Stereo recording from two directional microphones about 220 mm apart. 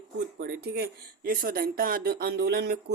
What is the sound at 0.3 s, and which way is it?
Speech, 45° right (ahead or behind).